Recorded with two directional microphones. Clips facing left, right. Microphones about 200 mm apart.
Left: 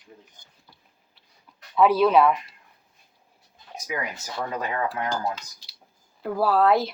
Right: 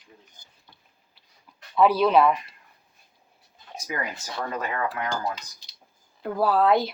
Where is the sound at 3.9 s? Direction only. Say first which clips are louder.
Left 1 dB; 5° left (ahead or behind).